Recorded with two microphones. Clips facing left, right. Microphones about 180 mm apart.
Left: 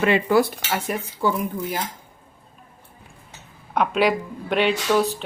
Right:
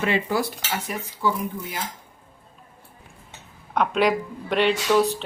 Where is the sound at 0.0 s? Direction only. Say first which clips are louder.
Left 5 dB; 60° left (ahead or behind).